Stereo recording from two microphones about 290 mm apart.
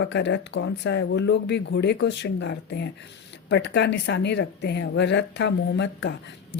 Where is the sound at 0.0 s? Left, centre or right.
Left.